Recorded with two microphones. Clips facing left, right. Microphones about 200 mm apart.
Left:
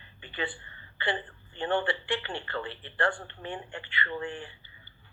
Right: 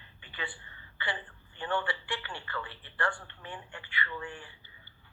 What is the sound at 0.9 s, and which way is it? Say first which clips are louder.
A man's voice: left 6 dB; 25° left (ahead or behind).